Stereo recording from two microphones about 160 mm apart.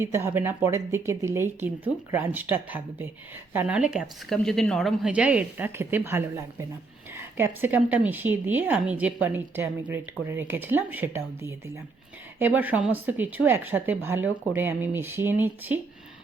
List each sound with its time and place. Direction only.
0.0 s speech: 15° right (ahead or behind)